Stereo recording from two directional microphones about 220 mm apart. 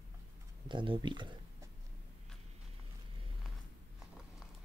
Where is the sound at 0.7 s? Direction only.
20° right (ahead or behind).